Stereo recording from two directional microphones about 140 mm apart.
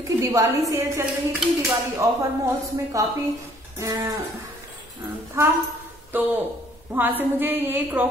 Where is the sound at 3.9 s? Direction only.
35° right (ahead or behind).